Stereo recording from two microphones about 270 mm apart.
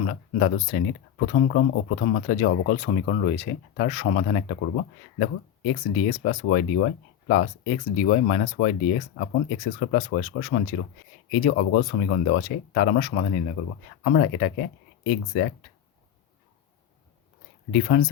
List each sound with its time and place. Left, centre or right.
0.0 s speech: left
17.7 s speech: left